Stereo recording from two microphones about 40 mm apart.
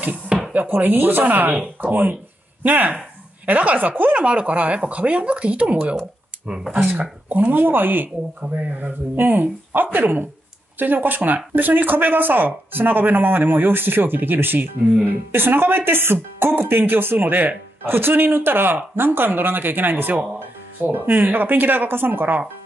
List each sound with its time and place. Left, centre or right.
0.0 s chopping: right
0.7 s speech: right
4.3 s speech: right
7.0 s speech: right
8.4 s speech: right
17.3 s speech: right
17.8 s speech: right